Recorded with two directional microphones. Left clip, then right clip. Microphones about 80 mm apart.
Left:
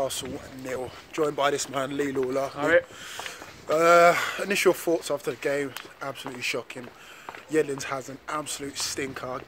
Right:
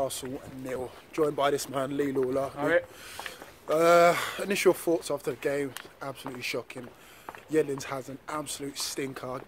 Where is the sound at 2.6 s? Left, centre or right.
Centre.